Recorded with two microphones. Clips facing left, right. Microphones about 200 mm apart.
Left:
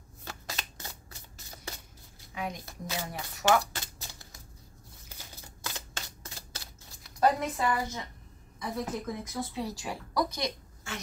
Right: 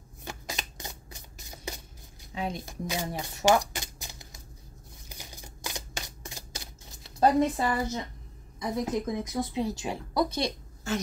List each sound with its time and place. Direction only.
0.2 s shuffling cards: 15° right (ahead or behind)
2.3 s speech: 30° right (ahead or behind)
2.7 s speech: 15° right (ahead or behind)
3.1 s speech: 25° right (ahead or behind)
3.4 s shuffling cards: 15° right (ahead or behind)
5.1 s typewriter: 15° right (ahead or behind)
8.5 s speech: 15° right (ahead or behind); by 11.0 s 35° right (ahead or behind)